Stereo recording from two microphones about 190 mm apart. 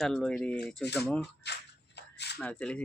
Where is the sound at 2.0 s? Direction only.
65° left (ahead or behind).